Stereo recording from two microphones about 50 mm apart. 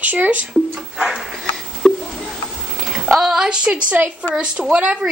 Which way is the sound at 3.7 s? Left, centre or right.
Right.